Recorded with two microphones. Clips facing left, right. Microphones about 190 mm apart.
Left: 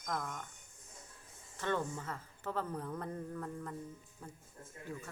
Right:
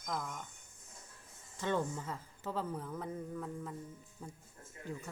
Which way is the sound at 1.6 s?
10° right (ahead or behind).